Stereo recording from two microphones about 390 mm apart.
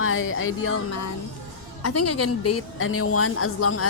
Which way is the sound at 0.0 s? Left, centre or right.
Left.